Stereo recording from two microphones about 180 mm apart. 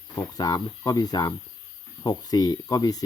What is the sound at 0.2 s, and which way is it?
Speech, 20° left (ahead or behind).